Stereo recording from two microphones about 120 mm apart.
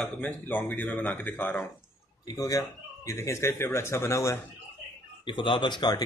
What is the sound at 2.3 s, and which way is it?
Speech, 30° left (ahead or behind).